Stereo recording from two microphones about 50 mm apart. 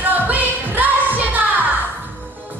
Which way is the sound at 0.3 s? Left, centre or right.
Right.